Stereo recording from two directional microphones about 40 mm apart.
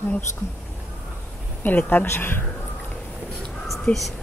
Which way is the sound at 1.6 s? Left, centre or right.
Left.